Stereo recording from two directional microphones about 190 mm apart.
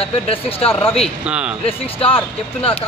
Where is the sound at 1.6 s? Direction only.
30° left (ahead or behind).